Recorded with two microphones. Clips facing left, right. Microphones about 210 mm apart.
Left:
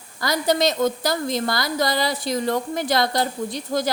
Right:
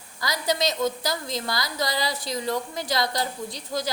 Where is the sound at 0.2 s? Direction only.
55° left (ahead or behind).